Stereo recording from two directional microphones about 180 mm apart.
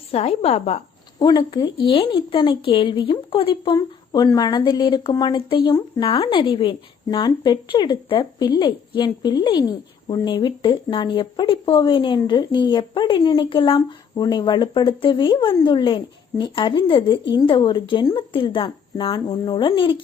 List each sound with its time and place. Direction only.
0.1 s a woman's voice: 35° left (ahead or behind)
1.2 s a woman's voice: 25° left (ahead or behind)